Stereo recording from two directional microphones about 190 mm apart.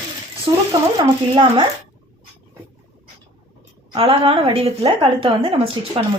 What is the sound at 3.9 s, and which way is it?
Speech, 30° right (ahead or behind).